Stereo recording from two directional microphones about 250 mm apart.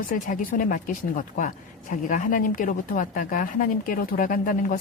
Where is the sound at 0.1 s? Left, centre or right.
Left.